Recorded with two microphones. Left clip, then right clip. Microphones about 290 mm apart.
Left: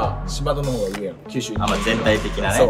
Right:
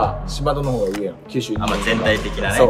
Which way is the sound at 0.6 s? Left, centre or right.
Centre.